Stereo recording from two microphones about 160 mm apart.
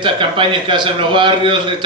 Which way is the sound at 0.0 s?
30° right (ahead or behind).